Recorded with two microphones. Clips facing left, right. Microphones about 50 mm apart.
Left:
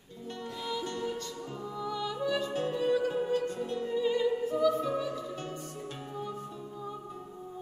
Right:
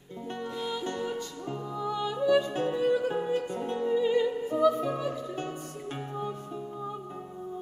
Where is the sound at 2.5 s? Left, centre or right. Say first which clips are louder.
Right 2 dB; right.